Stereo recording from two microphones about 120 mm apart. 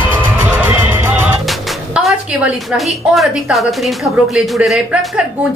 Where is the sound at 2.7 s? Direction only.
Centre (ahead or behind).